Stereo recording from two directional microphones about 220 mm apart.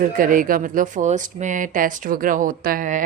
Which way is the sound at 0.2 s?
40° right (ahead or behind).